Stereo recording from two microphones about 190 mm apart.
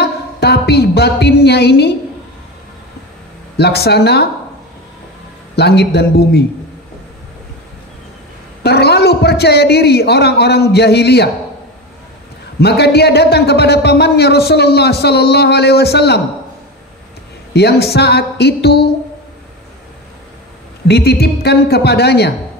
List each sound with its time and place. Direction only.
0.0 s a sound: 60° left (ahead or behind)
3.5 s a man's voice: 60° left (ahead or behind)
5.6 s a man's voice: 60° left (ahead or behind)
8.6 s a man's voice: 60° left (ahead or behind)
12.5 s a man's voice: 60° left (ahead or behind)
17.6 s a man's voice: 60° left (ahead or behind)
20.9 s a man's voice: 60° left (ahead or behind)